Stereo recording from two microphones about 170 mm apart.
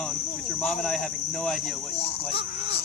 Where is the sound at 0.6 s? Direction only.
Centre (ahead or behind).